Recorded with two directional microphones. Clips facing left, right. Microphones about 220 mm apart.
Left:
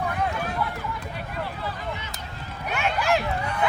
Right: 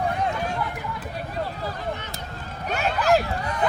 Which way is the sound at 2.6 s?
40° right (ahead or behind).